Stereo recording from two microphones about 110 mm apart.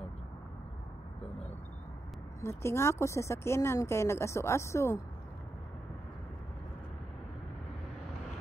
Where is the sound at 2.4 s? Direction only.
25° left (ahead or behind).